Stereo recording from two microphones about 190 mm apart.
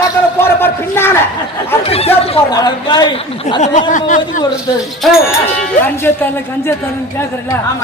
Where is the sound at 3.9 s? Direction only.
40° left (ahead or behind).